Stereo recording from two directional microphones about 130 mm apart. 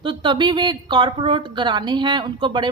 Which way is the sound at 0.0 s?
40° right (ahead or behind).